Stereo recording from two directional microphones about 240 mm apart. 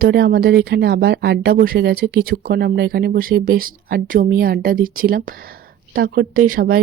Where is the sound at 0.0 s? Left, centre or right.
Right.